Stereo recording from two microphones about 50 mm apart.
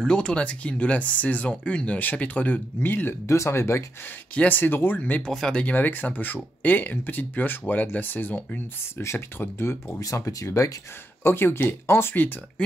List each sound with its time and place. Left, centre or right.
0.0 s speech: centre; by 3.2 s left
3.3 s speech: left
4.4 s speech: left
9.0 s speech: left
9.9 s speech: left
11.2 s speech: left